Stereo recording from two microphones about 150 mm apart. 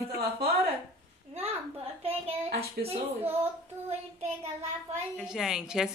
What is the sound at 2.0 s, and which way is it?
Speech, 40° right (ahead or behind).